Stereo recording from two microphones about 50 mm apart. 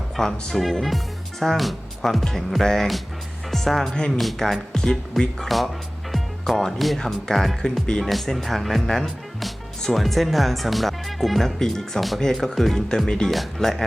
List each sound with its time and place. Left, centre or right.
0.2 s speech: centre
5.5 s music: centre
6.6 s speech: centre
13.1 s speech: centre
13.3 s speech: centre